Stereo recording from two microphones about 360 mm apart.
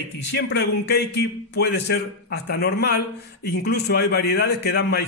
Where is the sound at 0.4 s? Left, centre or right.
Left.